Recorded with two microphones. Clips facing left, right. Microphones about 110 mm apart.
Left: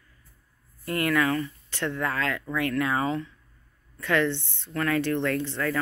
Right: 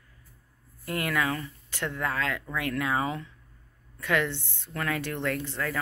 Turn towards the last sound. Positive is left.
turn(degrees=-10)  # may be behind; listen again after turning